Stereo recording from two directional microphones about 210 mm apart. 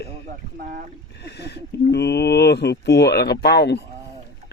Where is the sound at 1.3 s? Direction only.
50° left (ahead or behind).